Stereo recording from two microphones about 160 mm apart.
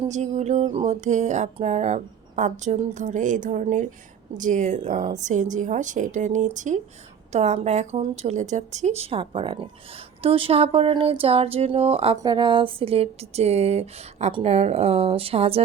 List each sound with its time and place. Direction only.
0.1 s a woman's voice: 45° right (ahead or behind)
0.6 s speech: 30° right (ahead or behind)
0.9 s a woman's voice: 45° right (ahead or behind)
12.2 s speech: 30° right (ahead or behind)